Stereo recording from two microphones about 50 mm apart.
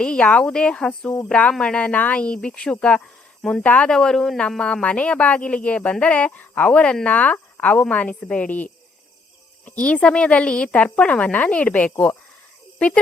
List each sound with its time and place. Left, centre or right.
0.0 s speech: centre
3.8 s speech: centre; by 6.7 s left
6.7 s speech: left